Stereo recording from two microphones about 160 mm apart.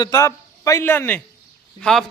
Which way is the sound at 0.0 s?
20° left (ahead or behind).